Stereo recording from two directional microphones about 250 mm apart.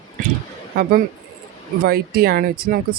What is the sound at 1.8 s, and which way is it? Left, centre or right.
Speech, right.